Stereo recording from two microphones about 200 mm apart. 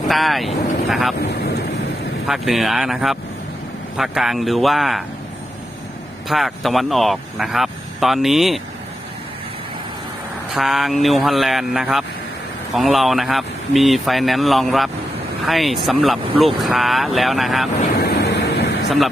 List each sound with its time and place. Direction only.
0.1 s speech: centre (ahead or behind)
2.2 s speech: centre (ahead or behind)
6.2 s speech: centre (ahead or behind)
10.5 s speech: centre (ahead or behind)
18.0 s vehicle: 55° left (ahead or behind)